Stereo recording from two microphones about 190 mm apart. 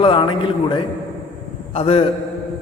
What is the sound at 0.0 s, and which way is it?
Speech, 25° left (ahead or behind).